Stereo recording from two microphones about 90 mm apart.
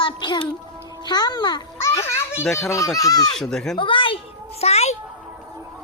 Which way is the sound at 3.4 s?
5° left (ahead or behind).